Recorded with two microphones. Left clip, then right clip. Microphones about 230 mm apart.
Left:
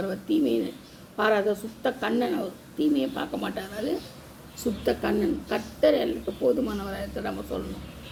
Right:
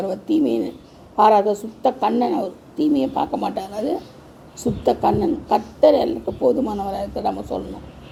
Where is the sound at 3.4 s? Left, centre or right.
Centre.